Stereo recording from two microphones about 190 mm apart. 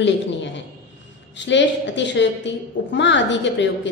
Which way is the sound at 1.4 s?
70° left (ahead or behind).